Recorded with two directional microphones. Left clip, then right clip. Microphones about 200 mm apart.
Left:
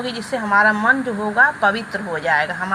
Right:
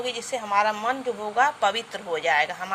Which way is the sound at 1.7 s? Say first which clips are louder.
Left 6 dB; 45° right (ahead or behind).